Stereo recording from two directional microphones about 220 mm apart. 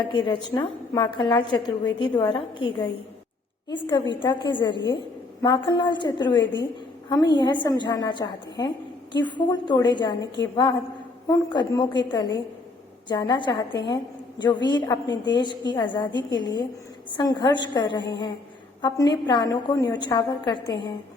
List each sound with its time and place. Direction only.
0.1 s a woman's voice: 20° left (ahead or behind)